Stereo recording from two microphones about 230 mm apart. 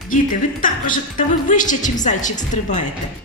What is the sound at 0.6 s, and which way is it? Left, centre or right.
A woman's voice, left.